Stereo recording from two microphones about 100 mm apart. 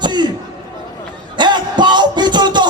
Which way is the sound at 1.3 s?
50° right (ahead or behind).